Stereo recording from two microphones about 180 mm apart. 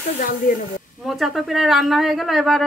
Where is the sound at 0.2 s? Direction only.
50° left (ahead or behind).